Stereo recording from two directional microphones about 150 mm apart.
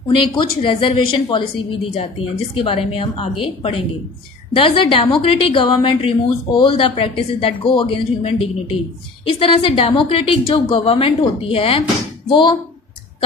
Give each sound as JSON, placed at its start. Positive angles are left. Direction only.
{"t": 0.1, "sound": "a woman's voice", "side_deg": 35}